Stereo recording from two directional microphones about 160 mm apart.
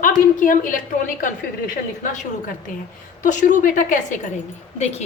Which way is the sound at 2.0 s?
55° left (ahead or behind).